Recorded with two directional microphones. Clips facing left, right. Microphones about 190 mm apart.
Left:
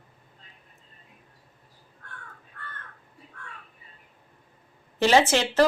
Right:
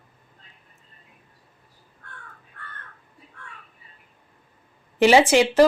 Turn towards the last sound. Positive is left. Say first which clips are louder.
# right 5 dB
turn(degrees=-15)  # may be behind; listen again after turning